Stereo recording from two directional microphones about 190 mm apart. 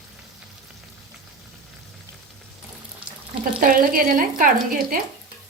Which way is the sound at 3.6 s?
50° right (ahead or behind).